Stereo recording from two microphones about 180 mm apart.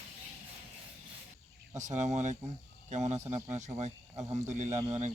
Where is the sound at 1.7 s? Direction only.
40° right (ahead or behind).